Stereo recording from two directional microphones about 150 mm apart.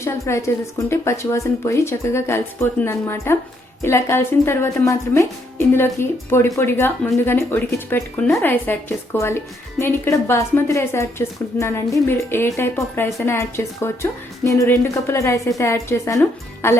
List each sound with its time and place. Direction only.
0.0 s a woman's voice: 20° left (ahead or behind)